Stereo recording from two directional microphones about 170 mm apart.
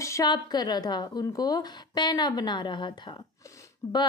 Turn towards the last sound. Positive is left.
turn(degrees=25)  # may be behind; listen again after turning